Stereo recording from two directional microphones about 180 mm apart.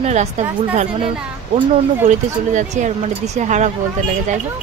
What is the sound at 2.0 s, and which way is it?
Speech, 45° right (ahead or behind).